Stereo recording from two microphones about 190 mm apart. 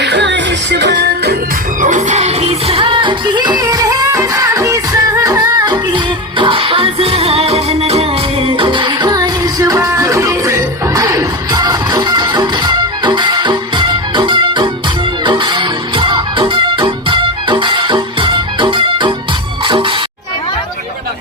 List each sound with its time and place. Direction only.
0.0 s music: 65° right (ahead or behind)
1.8 s music: 40° right (ahead or behind)